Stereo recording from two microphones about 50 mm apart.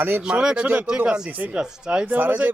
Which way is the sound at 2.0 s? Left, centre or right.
Right.